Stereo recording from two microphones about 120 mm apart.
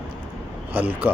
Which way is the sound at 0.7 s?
15° right (ahead or behind).